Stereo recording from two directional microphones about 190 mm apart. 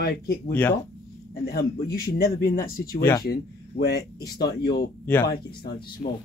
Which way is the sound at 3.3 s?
55° left (ahead or behind).